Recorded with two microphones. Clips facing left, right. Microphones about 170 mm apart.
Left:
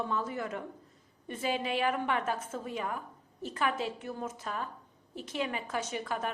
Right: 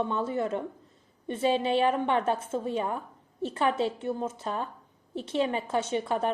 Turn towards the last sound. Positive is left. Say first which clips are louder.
# right 7 dB
turn(degrees=-30)  # may be behind; listen again after turning